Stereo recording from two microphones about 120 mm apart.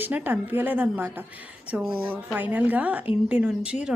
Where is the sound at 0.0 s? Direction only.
15° right (ahead or behind).